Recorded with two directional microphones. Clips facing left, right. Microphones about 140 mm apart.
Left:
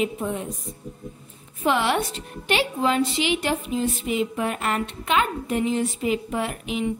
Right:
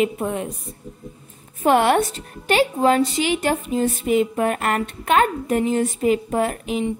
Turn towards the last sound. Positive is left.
turn(degrees=-45)  # may be behind; listen again after turning